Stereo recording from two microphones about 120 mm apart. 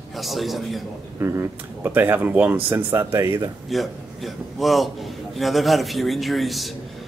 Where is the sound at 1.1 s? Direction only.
20° right (ahead or behind).